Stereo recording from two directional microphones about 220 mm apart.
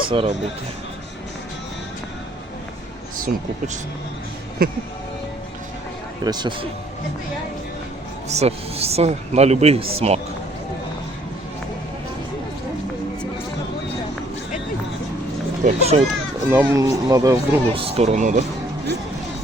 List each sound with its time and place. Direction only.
0.1 s speech: 25° right (ahead or behind)
4.6 s speech: 45° right (ahead or behind)
6.2 s speech: 20° right (ahead or behind)
8.3 s speech: 30° right (ahead or behind)
15.6 s speech: 30° right (ahead or behind)
16.5 s speech: 10° right (ahead or behind)
17.8 s speech: 30° right (ahead or behind)